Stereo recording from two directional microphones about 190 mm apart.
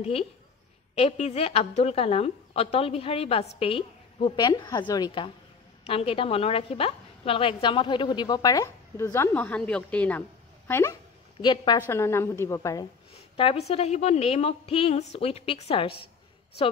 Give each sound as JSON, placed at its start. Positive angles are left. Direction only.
{"t": 0.9, "sound": "a woman's voice", "side_deg": 35}
{"t": 13.1, "sound": "a woman's voice", "side_deg": 30}